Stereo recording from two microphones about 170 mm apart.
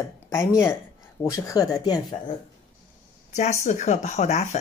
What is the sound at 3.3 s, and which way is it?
Speech, 45° left (ahead or behind).